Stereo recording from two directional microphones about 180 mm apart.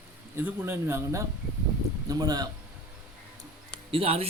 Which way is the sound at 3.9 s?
35° right (ahead or behind).